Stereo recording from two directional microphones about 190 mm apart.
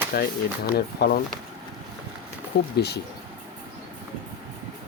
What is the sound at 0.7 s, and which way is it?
Speech, 55° left (ahead or behind).